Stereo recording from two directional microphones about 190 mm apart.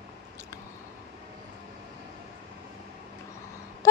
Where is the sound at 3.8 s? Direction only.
15° left (ahead or behind).